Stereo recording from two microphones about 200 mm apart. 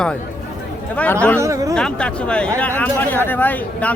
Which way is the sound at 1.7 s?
5° left (ahead or behind).